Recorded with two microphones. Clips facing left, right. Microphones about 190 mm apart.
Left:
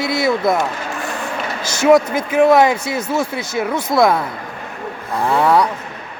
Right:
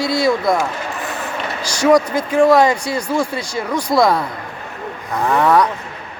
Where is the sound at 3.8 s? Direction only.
Centre (ahead or behind).